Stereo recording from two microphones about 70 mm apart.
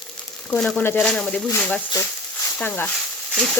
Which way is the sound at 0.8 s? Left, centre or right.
Left.